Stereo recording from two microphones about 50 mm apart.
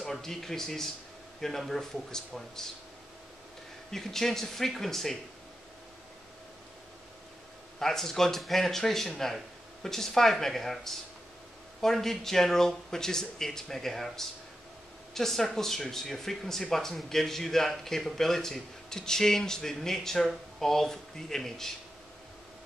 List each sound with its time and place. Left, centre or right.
0.0 s a man's voice: centre
3.9 s a man's voice: centre
7.8 s a man's voice: centre